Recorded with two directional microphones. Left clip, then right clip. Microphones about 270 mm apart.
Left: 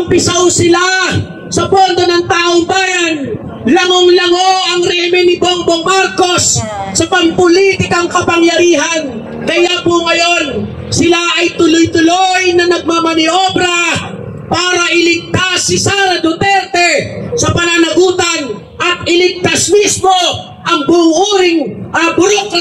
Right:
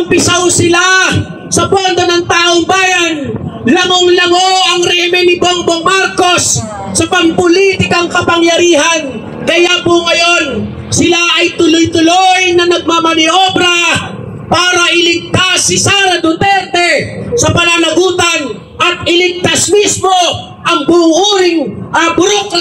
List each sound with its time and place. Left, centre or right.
0.6 s speech: right